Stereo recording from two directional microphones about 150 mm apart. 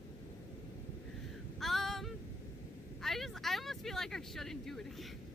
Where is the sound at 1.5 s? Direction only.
Centre (ahead or behind).